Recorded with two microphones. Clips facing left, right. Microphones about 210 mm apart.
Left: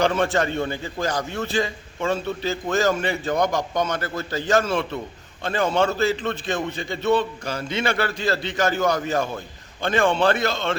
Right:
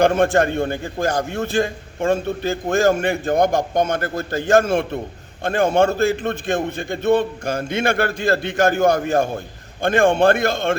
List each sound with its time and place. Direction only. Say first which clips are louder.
0.0 s a man's voice: right 5 dB; 50° right (ahead or behind)